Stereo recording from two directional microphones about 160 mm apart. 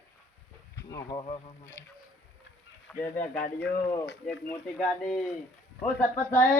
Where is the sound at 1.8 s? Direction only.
20° left (ahead or behind).